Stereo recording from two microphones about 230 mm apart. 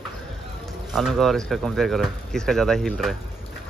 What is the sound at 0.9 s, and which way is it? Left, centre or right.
Speech, centre.